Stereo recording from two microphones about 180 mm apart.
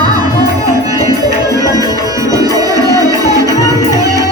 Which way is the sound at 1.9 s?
20° right (ahead or behind).